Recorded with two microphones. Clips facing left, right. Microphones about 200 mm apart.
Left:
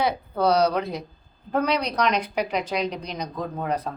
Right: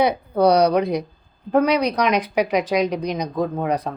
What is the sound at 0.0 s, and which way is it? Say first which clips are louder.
Speech: right 6 dB; 15° right (ahead or behind).